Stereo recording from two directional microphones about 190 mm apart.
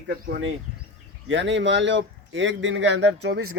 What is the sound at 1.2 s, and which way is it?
A man's voice, 75° right (ahead or behind).